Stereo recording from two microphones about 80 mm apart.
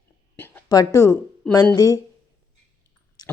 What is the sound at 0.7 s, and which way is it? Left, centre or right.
A woman's voice, left.